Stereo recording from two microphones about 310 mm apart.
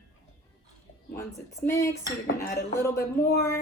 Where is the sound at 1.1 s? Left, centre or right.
Centre.